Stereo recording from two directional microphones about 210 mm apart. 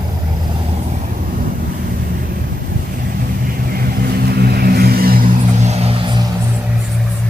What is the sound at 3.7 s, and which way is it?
Vehicle, 45° right (ahead or behind).